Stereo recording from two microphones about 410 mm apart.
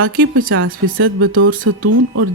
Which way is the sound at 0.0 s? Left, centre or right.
Right.